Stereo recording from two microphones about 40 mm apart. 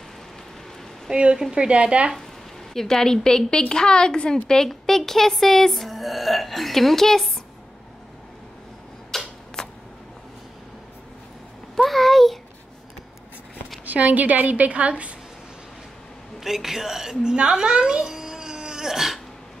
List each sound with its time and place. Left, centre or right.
1.1 s speech: right
2.7 s a woman's voice: centre
9.1 s a sound: centre
11.7 s a sound: centre
13.8 s a woman's voice: right
16.3 s a woman's voice: centre